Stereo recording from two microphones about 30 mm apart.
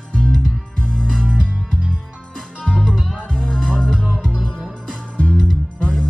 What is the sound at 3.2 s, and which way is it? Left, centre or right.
Music, left.